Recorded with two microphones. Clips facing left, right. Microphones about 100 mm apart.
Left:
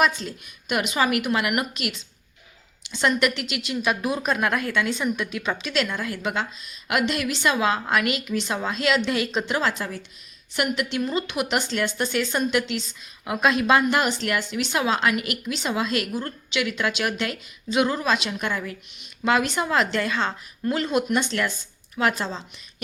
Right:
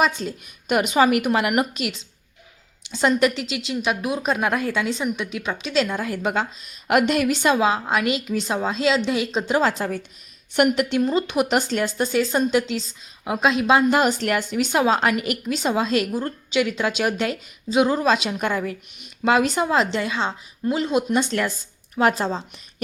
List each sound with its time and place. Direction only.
0.2 s speech: 35° right (ahead or behind)
3.1 s a woman's voice: 30° right (ahead or behind)
6.1 s a woman's voice: 45° right (ahead or behind); by 9.4 s 20° right (ahead or behind)
9.4 s speech: 35° right (ahead or behind)
10.5 s speech: 50° right (ahead or behind); by 14.0 s 25° right (ahead or behind)
14.0 s speech: 40° right (ahead or behind)
14.8 s a woman's voice: 35° right (ahead or behind)
20.0 s a woman's voice: 15° right (ahead or behind)
21.2 s speech: 35° right (ahead or behind)